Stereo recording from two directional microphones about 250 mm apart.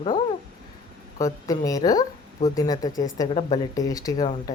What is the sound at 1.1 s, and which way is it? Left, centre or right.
Speech, centre.